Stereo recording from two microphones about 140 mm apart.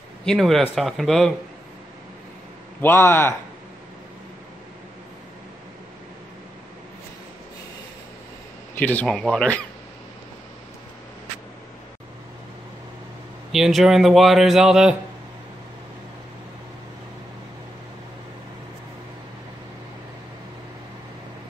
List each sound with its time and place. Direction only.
0.2 s a man's voice: 5° left (ahead or behind)
2.8 s speech: 15° left (ahead or behind)
8.7 s a man's voice: 10° left (ahead or behind)
13.5 s a man's voice: centre (ahead or behind)